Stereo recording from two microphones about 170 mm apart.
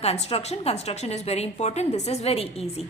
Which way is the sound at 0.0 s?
35° left (ahead or behind).